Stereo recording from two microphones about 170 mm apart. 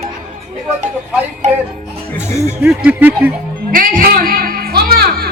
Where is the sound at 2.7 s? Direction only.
10° right (ahead or behind).